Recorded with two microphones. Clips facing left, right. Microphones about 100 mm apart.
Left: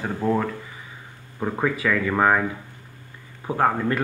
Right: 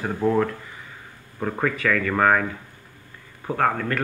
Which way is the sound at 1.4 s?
10° left (ahead or behind).